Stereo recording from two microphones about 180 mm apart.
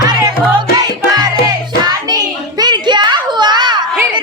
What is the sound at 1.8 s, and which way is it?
Child singing, 20° right (ahead or behind).